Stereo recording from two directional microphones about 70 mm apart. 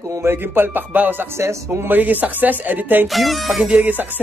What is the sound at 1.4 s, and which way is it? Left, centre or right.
Speech, right.